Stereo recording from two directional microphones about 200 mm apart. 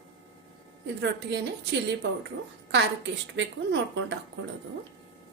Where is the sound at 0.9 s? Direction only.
60° right (ahead or behind).